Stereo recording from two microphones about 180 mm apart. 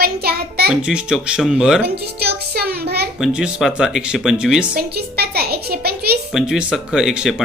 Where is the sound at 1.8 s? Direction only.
65° right (ahead or behind).